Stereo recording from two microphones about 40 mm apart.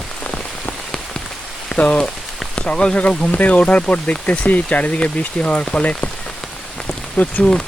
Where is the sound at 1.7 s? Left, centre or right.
Left.